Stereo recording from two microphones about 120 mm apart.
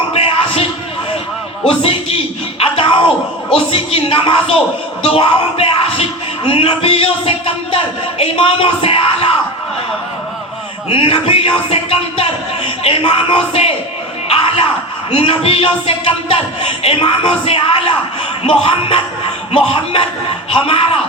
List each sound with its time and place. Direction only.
0.1 s a sound: 50° left (ahead or behind)
1.6 s speech: 50° left (ahead or behind)
2.6 s music: 50° left (ahead or behind)
3.7 s speech: 50° left (ahead or behind)
10.8 s speech: 50° left (ahead or behind)
14.3 s a sound: 50° left (ahead or behind)
15.1 s speech: 50° left (ahead or behind)